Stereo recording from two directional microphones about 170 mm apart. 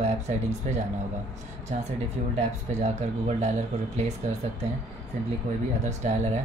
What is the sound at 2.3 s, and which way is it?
Speech, 40° right (ahead or behind).